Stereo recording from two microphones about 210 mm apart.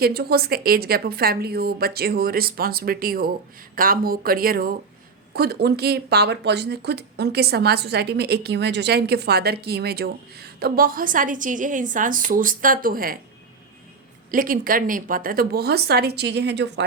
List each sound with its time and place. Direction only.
0.0 s speech: 45° right (ahead or behind)
14.3 s speech: 40° right (ahead or behind)